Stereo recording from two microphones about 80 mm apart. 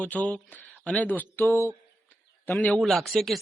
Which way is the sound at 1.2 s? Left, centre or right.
Left.